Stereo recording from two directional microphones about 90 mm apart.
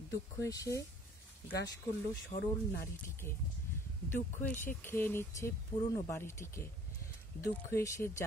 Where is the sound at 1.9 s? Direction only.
25° left (ahead or behind).